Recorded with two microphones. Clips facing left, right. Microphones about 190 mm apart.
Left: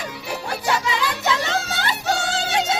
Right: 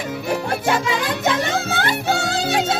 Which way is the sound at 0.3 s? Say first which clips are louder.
Right 4 dB; 50° right (ahead or behind).